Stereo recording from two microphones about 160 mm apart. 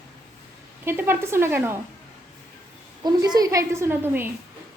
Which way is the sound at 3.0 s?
25° right (ahead or behind).